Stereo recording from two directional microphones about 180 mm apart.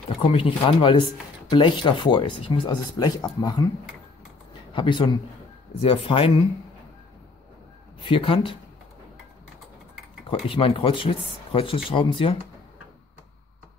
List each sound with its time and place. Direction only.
0.3 s speech: 30° left (ahead or behind)
4.7 s speech: 25° left (ahead or behind)
8.0 s speech: 30° left (ahead or behind)
10.5 s speech: 30° left (ahead or behind)